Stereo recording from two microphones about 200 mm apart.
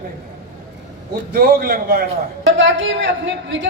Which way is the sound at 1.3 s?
50° right (ahead or behind).